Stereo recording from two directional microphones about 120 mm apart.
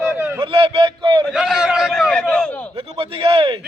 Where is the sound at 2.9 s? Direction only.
50° right (ahead or behind).